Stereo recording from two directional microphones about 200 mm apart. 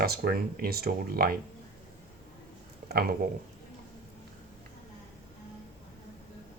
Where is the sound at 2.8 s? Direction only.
50° right (ahead or behind).